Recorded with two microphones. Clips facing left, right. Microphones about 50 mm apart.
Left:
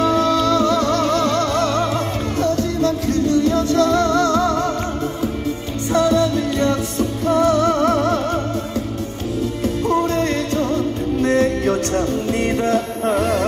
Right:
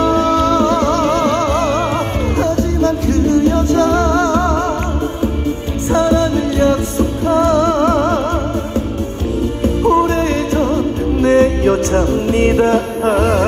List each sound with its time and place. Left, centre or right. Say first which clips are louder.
0.0 s music: right 3 dB; right
5.9 s music: right 3 dB; right
9.8 s music: right 5 dB; right